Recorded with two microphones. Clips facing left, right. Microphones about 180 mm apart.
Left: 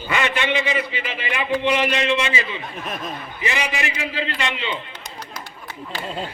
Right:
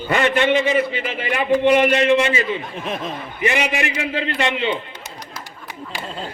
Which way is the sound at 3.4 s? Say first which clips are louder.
Right 5 dB; 55° right (ahead or behind).